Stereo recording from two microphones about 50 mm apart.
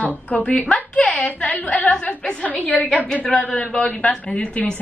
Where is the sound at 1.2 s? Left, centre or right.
Left.